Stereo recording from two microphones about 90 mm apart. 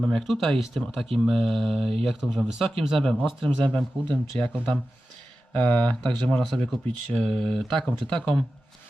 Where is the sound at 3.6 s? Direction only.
10° left (ahead or behind).